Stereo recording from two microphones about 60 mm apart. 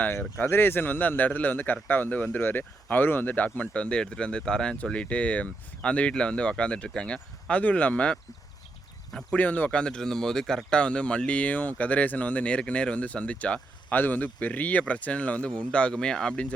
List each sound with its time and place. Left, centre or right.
0.0 s a man's voice: left